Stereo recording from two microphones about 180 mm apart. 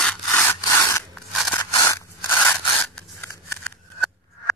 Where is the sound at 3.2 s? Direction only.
15° left (ahead or behind).